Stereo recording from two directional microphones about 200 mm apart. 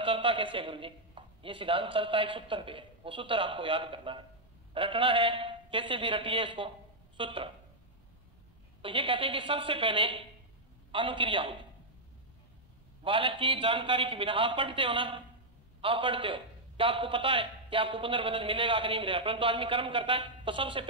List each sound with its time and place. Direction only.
0.0 s a man's voice: 25° right (ahead or behind)
8.8 s a man's voice: 25° right (ahead or behind)
13.0 s a man's voice: 25° right (ahead or behind)